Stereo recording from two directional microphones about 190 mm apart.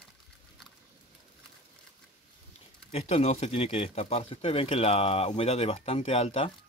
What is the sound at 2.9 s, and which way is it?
Speech, 30° left (ahead or behind).